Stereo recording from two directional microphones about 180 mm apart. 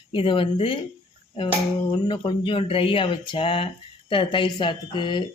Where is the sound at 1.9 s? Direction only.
25° left (ahead or behind).